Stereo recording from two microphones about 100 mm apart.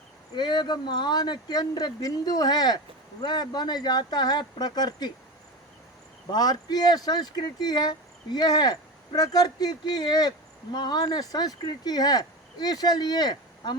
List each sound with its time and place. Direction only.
0.3 s speech: 50° left (ahead or behind)
6.3 s speech: 40° left (ahead or behind)